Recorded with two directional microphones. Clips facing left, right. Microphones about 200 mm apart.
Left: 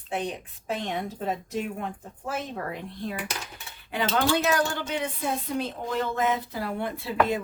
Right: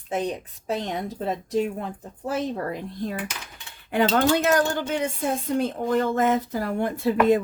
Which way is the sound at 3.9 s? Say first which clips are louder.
Right 5 dB; 50° right (ahead or behind).